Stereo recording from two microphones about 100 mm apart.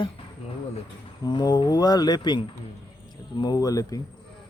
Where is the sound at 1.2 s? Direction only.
45° left (ahead or behind).